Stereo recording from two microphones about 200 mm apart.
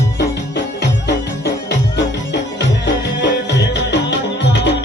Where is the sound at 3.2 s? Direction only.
60° left (ahead or behind).